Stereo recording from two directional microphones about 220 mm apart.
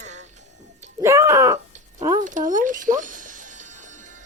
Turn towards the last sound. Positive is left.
turn(degrees=-35)  # may be behind; listen again after turning